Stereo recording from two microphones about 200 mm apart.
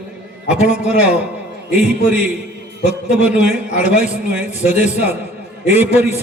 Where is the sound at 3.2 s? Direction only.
5° right (ahead or behind).